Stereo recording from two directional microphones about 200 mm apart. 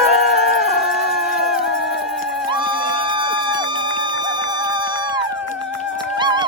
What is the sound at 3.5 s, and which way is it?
Music, 90° left.